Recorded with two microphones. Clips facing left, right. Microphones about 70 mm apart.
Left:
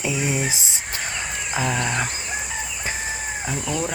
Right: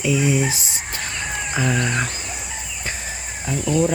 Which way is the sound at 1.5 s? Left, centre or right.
Centre.